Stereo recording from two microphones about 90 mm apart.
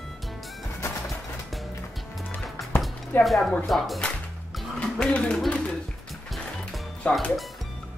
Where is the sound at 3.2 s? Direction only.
Centre (ahead or behind).